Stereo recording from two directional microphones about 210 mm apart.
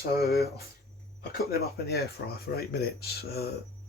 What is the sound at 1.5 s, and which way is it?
Speech, 45° left (ahead or behind).